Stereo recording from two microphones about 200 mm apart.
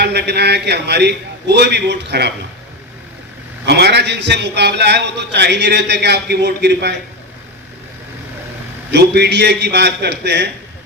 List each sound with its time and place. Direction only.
0.0 s a man's voice: 55° right (ahead or behind)
3.7 s a man's voice: 55° right (ahead or behind)
8.9 s a man's voice: 55° right (ahead or behind)